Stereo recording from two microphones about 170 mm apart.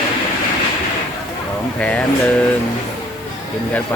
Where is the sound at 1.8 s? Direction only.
10° left (ahead or behind).